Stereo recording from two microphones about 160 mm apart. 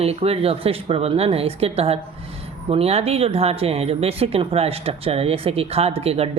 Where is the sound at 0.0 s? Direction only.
40° right (ahead or behind).